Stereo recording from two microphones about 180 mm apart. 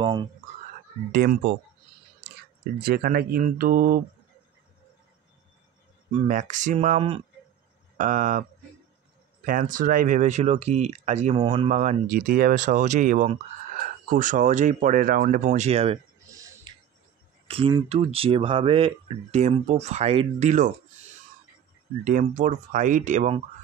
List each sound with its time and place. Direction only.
0.0 s speech: 25° right (ahead or behind)
1.1 s speech: 60° right (ahead or behind)
2.8 s speech: 55° right (ahead or behind)
6.1 s speech: 45° right (ahead or behind)
8.0 s speech: 45° right (ahead or behind)
11.3 s speech: 30° right (ahead or behind)
11.7 s speech: 45° right (ahead or behind)
17.5 s speech: 30° right (ahead or behind)
22.0 s speech: 45° right (ahead or behind)